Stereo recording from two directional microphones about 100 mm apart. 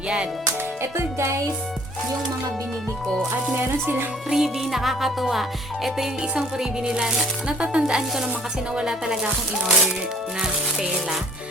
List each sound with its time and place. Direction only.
0.8 s music: 30° right (ahead or behind)
3.5 s music: 20° right (ahead or behind)
4.3 s music: 5° right (ahead or behind)
8.7 s speech: 5° right (ahead or behind)
10.4 s music: 5° right (ahead or behind)